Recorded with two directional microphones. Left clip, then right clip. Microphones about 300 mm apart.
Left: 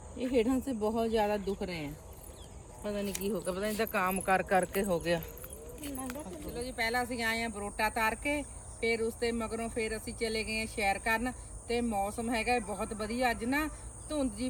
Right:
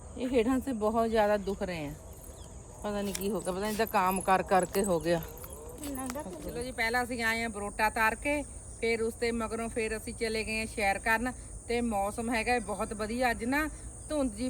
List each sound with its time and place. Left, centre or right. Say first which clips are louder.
0.2 s speech: right 1 dB; centre
2.8 s speech: right 2 dB; right
6.1 s speech: right 2 dB; centre